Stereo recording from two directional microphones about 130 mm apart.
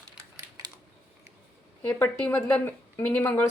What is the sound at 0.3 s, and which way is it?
Typing, 30° right (ahead or behind).